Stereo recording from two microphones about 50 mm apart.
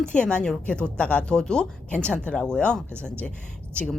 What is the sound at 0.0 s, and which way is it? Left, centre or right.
Speech, left.